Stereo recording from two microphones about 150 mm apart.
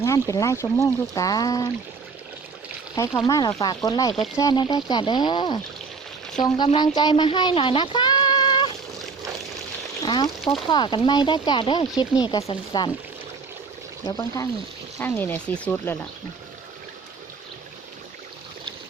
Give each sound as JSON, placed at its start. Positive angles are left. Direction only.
{"t": 0.0, "sound": "speech", "side_deg": 20}
{"t": 2.9, "sound": "speech", "side_deg": 25}
{"t": 6.7, "sound": "speech", "side_deg": 30}
{"t": 10.1, "sound": "speech", "side_deg": 30}
{"t": 14.0, "sound": "speech", "side_deg": 25}
{"t": 14.9, "sound": "speech", "side_deg": 15}